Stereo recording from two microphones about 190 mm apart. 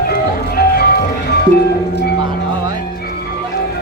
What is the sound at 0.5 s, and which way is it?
Music, 55° left (ahead or behind).